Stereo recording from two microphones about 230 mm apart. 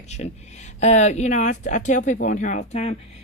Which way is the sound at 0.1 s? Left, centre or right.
Left.